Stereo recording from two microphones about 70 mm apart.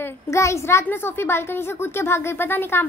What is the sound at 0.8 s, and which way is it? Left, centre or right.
A woman's voice, left.